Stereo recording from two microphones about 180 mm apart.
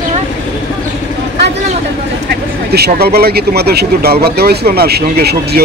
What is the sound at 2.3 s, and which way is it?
Speech, 60° right (ahead or behind).